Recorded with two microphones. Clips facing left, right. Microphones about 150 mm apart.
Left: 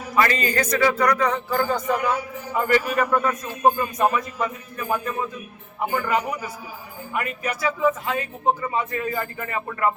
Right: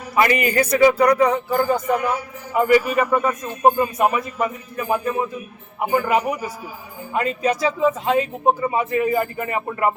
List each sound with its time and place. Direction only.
0.2 s a man's voice: 15° right (ahead or behind)